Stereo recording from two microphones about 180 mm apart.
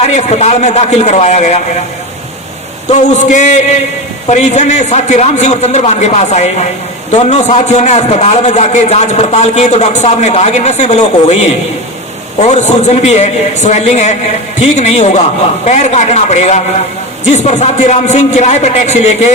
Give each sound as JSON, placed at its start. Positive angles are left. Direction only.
{"t": 0.0, "sound": "a man's voice", "side_deg": 35}
{"t": 3.0, "sound": "a man's voice", "side_deg": 40}